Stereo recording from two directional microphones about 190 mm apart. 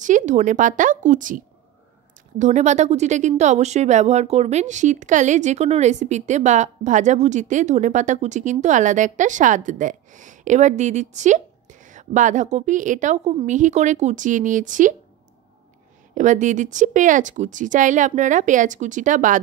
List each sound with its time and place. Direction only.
0.0 s speech: 40° right (ahead or behind)
16.2 s speech: 40° right (ahead or behind)